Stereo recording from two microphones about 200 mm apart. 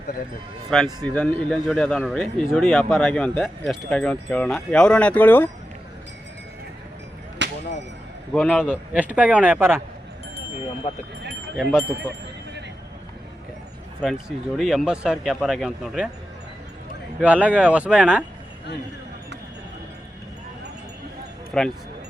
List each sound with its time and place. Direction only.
0.7 s a man's voice: 5° left (ahead or behind)
7.4 s a sound: 65° right (ahead or behind)
8.3 s a man's voice: centre (ahead or behind)
11.5 s a man's voice: centre (ahead or behind)
14.0 s a man's voice: centre (ahead or behind)
17.2 s a man's voice: 5° right (ahead or behind)
21.5 s a man's voice: 5° left (ahead or behind)